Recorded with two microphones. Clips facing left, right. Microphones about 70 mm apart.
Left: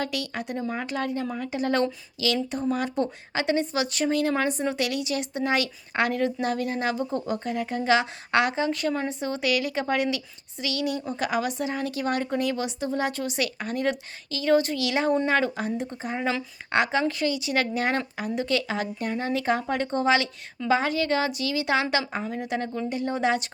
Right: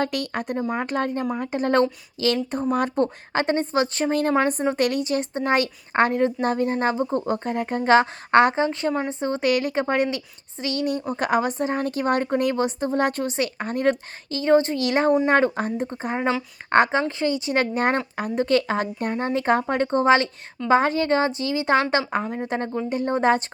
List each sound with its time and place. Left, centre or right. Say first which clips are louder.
0.0 s speech: right 5 dB; right
1.2 s speech: right 4 dB; right
1.5 s speech: right 4 dB; right
13.3 s speech: right 3 dB; right